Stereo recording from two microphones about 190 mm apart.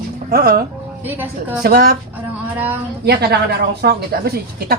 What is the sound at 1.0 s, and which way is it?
Speech, 10° right (ahead or behind).